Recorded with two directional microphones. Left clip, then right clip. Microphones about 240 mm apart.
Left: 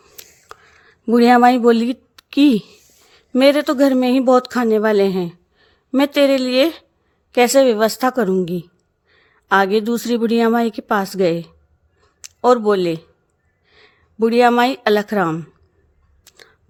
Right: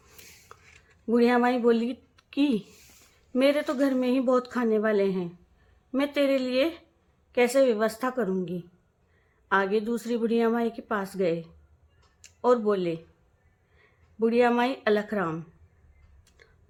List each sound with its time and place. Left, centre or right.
0.2 s a sound: left
1.0 s speech: left
16.3 s music: left